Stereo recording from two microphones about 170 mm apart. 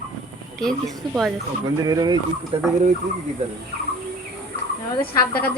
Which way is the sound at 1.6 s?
20° right (ahead or behind).